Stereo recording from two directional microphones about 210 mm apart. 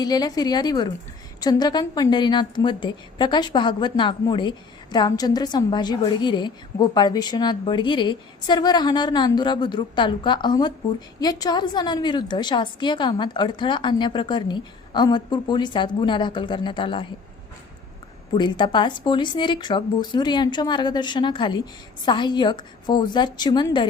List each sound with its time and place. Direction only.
0.0 s a woman's voice: 20° left (ahead or behind)
18.3 s a woman's voice: 20° left (ahead or behind)